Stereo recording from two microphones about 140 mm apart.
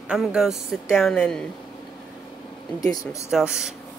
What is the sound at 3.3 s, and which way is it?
Speech, 5° right (ahead or behind).